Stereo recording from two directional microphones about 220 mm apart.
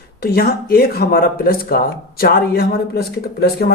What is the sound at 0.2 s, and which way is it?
Speech, 45° left (ahead or behind).